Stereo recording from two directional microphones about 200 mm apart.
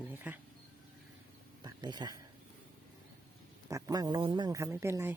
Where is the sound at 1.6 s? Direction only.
20° right (ahead or behind).